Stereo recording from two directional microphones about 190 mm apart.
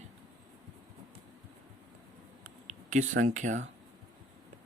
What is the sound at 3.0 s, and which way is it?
Speech, 90° right.